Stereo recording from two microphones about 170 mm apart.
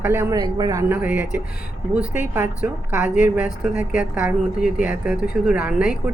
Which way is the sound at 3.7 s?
50° left (ahead or behind).